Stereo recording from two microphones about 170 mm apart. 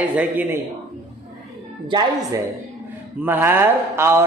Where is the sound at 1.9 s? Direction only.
25° right (ahead or behind).